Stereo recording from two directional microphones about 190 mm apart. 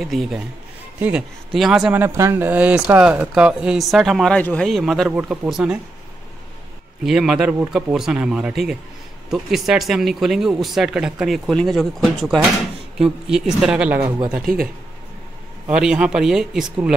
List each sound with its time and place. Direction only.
0.0 s speech: centre (ahead or behind)
7.1 s speech: 5° right (ahead or behind)
14.5 s speech: 45° right (ahead or behind)
15.6 s speech: 5° right (ahead or behind)